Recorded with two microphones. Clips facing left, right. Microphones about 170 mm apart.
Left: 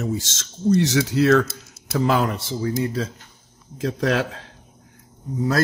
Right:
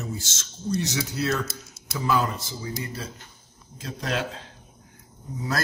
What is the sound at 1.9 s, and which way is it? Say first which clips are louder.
Speech: left 5 dB; 75° left (ahead or behind).